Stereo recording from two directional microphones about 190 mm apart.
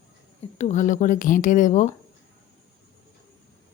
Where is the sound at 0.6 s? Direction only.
40° left (ahead or behind).